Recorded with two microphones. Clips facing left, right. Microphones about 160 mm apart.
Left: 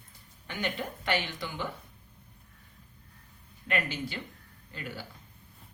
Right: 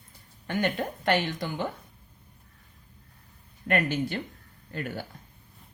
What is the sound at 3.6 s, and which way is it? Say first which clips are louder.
A woman's voice: right 6 dB; 50° right (ahead or behind).